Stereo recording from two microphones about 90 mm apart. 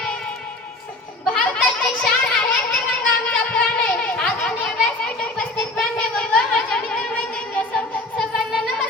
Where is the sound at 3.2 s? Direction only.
20° left (ahead or behind).